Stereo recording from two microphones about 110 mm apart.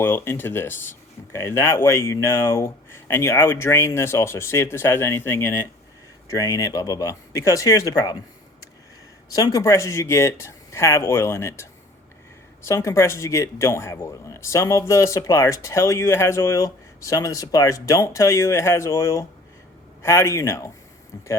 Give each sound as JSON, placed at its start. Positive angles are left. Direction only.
{"t": 0.0, "sound": "speech", "side_deg": 20}
{"t": 6.2, "sound": "speech", "side_deg": 30}
{"t": 9.3, "sound": "speech", "side_deg": 35}